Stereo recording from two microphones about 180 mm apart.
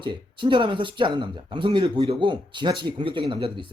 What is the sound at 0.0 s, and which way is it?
Speech, 25° right (ahead or behind).